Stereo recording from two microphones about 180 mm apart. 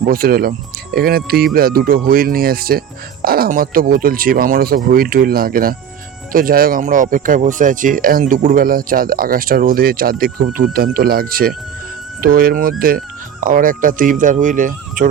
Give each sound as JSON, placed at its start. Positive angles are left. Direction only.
{"t": 0.1, "sound": "speech", "side_deg": -55}